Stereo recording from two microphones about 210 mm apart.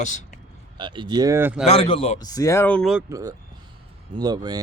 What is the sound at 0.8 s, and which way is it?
Speech, 20° right (ahead or behind).